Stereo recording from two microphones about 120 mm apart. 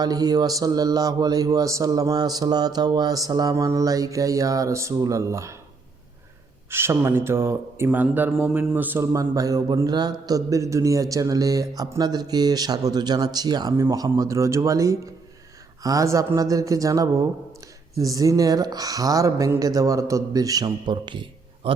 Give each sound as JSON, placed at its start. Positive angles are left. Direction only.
{"t": 0.0, "sound": "a man's voice", "side_deg": -30}
{"t": 6.7, "sound": "speech", "side_deg": -20}
{"t": 8.4, "sound": "a man's voice", "side_deg": -5}
{"t": 8.7, "sound": "speech", "side_deg": -15}
{"t": 9.1, "sound": "a man's voice", "side_deg": -30}